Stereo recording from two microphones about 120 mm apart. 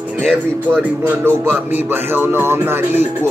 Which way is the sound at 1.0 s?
20° right (ahead or behind).